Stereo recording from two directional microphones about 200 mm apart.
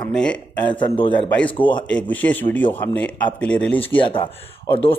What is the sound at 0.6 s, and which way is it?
Speech, 25° left (ahead or behind).